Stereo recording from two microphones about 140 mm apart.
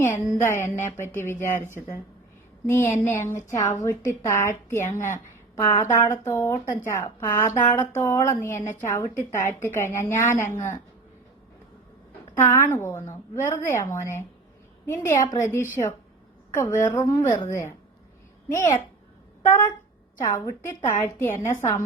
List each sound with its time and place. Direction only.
0.0 s a woman's voice: 20° left (ahead or behind)
2.9 s a woman's voice: 20° left (ahead or behind)
12.4 s a woman's voice: 15° left (ahead or behind)
20.2 s a woman's voice: 20° left (ahead or behind)